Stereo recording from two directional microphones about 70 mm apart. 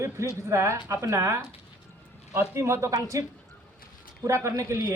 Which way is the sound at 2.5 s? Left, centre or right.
Right.